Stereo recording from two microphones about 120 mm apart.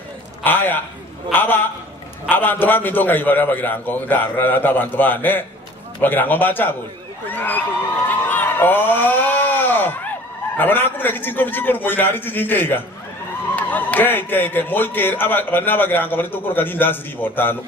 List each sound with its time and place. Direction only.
0.4 s a man's voice: 15° left (ahead or behind)
8.3 s a sound: 15° left (ahead or behind)
10.6 s a man's voice: 15° left (ahead or behind)